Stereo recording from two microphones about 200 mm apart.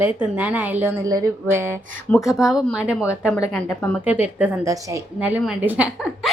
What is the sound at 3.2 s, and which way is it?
Speech, 15° left (ahead or behind).